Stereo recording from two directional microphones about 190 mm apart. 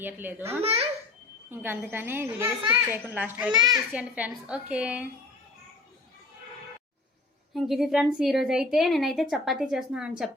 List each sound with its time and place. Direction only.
0.0 s a woman's voice: 10° right (ahead or behind)
0.6 s a child's voice: 30° right (ahead or behind)
1.5 s a woman's voice: 10° right (ahead or behind)
7.5 s a woman's voice: centre (ahead or behind)